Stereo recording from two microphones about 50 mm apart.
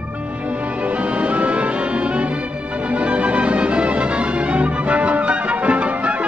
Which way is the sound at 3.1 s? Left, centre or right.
Right.